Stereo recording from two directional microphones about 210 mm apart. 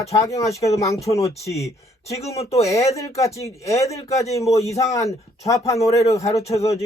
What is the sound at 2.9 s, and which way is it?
A man's voice, 15° left (ahead or behind).